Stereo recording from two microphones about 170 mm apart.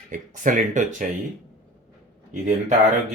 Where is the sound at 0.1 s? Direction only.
50° right (ahead or behind).